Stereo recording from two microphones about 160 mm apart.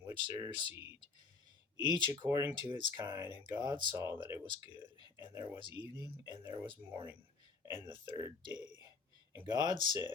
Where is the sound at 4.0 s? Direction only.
15° right (ahead or behind).